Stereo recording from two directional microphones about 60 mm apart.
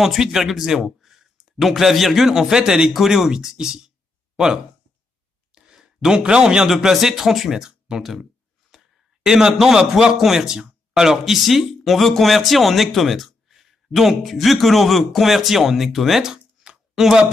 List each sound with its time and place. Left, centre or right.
0.0 s speech: centre
5.5 s a sound: centre
6.7 s a man's voice: centre